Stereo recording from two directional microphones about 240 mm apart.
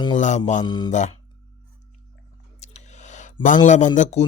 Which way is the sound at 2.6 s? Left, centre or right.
Left.